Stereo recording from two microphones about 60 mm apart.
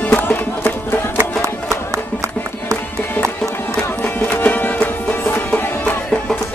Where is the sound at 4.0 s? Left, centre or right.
Left.